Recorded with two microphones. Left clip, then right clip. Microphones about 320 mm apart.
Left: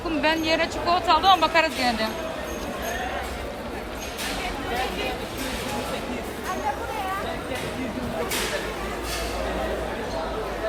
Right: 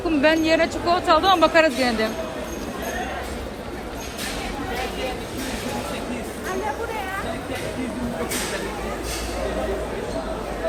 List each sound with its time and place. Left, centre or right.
0.2 s speech: centre